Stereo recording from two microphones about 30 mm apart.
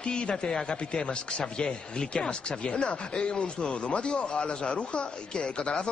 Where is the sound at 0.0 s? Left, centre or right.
Left.